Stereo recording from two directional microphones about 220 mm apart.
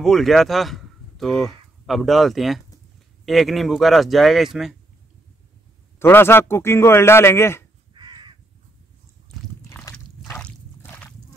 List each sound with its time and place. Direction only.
0.0 s speech: centre (ahead or behind)
5.9 s a man's voice: 10° left (ahead or behind)
7.9 s crow: 20° right (ahead or behind)
9.6 s a sound: 15° left (ahead or behind)
10.3 s squish: 5° left (ahead or behind)